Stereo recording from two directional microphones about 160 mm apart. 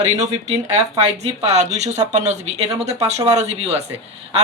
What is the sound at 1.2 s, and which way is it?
Speech, 45° right (ahead or behind).